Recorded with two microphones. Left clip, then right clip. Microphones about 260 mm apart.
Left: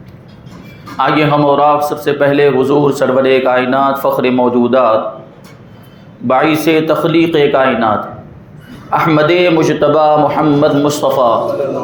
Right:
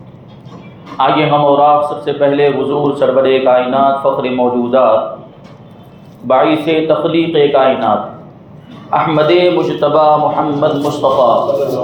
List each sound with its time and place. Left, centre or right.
0.9 s speech: left
6.2 s speech: left
8.9 s a man's voice: left